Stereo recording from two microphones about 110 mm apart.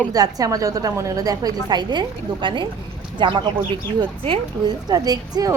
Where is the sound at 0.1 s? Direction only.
35° right (ahead or behind).